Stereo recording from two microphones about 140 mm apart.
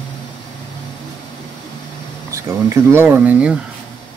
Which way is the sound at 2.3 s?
20° right (ahead or behind).